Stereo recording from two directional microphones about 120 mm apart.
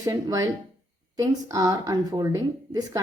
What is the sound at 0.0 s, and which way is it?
A woman's voice, 30° right (ahead or behind).